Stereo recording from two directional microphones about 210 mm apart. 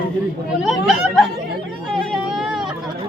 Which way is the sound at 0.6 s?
Centre (ahead or behind).